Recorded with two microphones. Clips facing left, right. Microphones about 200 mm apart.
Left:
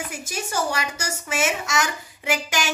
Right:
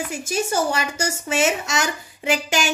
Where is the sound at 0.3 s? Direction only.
30° right (ahead or behind).